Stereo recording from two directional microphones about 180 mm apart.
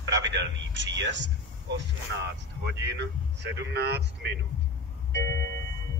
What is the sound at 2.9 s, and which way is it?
Speech, 75° right (ahead or behind).